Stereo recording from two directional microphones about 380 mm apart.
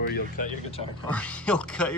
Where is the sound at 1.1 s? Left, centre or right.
Centre.